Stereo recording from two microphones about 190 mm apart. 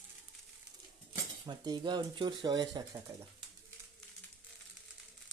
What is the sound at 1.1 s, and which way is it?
Speech, 20° right (ahead or behind).